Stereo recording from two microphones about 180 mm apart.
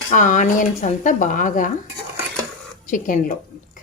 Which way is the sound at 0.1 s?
45° left (ahead or behind).